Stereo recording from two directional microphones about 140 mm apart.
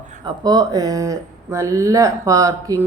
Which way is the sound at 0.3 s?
30° right (ahead or behind).